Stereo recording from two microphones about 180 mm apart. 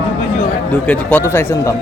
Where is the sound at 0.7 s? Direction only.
5° left (ahead or behind).